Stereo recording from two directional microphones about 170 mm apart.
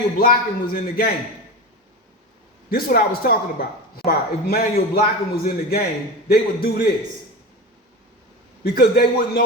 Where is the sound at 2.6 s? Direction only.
60° left (ahead or behind).